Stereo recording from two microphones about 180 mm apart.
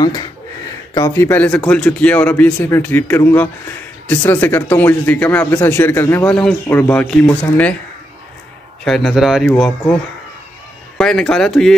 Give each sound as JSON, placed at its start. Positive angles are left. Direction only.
{"t": 0.0, "sound": "speech", "side_deg": 20}
{"t": 8.8, "sound": "speech", "side_deg": 0}
{"t": 11.0, "sound": "speech", "side_deg": 5}